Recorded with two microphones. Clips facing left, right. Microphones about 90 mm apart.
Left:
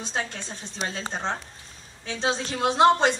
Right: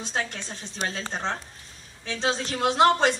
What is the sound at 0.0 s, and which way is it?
Speech, 20° left (ahead or behind).